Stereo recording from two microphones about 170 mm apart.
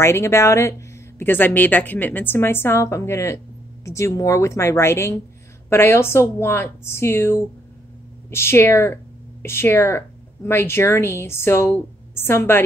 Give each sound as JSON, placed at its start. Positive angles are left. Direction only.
{"t": 0.0, "sound": "speech", "side_deg": 15}